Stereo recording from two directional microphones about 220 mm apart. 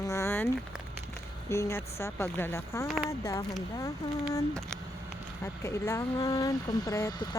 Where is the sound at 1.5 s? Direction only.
10° left (ahead or behind).